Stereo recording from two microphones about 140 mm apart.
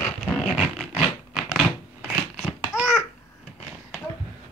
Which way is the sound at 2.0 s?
10° right (ahead or behind).